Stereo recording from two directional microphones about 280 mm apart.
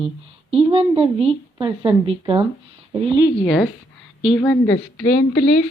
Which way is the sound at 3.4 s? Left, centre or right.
Centre.